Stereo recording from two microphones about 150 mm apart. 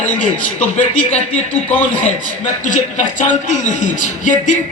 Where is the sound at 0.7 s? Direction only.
50° left (ahead or behind).